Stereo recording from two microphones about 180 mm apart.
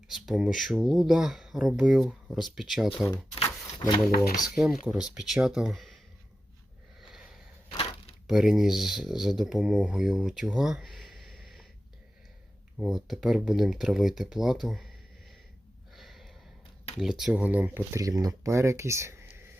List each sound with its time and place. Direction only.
0.1 s speech: centre (ahead or behind)
3.3 s a sound: 30° left (ahead or behind)
4.4 s speech: centre (ahead or behind)
7.0 s sniff: 5° right (ahead or behind)
8.3 s speech: 5° right (ahead or behind)
12.7 s speech: centre (ahead or behind)
16.0 s a sound: centre (ahead or behind)
17.0 s speech: centre (ahead or behind)